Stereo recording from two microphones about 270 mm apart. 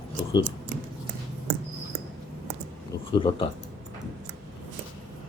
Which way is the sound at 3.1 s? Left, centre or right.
Centre.